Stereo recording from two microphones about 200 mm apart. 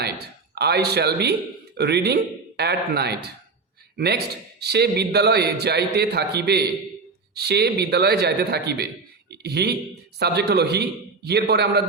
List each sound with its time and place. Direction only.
0.5 s a man's voice: 55° right (ahead or behind)